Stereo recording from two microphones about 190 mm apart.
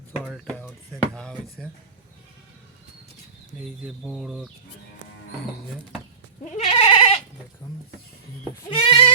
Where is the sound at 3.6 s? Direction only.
Centre (ahead or behind).